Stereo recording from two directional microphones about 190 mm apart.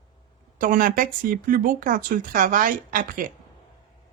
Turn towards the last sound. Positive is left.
turn(degrees=-45)  # may be behind; listen again after turning